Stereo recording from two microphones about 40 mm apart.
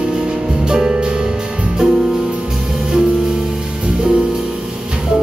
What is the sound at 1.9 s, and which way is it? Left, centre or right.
Music, centre.